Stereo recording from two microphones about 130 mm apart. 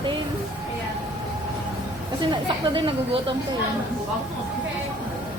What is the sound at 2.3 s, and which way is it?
Speech, 40° right (ahead or behind).